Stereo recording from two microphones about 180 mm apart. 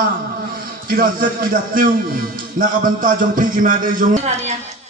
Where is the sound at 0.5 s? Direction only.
55° right (ahead or behind).